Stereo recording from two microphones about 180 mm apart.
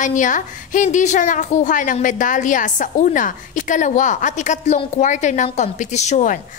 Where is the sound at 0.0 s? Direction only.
45° left (ahead or behind).